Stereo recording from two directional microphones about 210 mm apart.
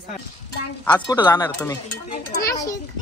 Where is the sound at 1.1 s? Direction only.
20° left (ahead or behind).